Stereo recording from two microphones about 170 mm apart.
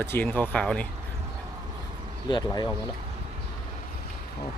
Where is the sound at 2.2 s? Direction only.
25° left (ahead or behind).